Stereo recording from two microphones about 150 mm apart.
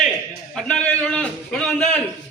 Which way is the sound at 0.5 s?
5° left (ahead or behind).